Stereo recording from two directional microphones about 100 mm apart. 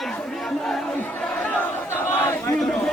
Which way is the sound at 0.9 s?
15° left (ahead or behind).